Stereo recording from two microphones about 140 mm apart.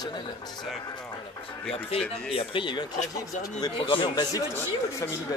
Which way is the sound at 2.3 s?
40° left (ahead or behind).